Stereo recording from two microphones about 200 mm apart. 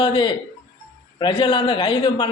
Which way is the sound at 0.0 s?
25° left (ahead or behind).